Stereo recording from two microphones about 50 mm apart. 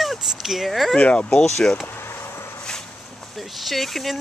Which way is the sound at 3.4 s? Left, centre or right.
Centre.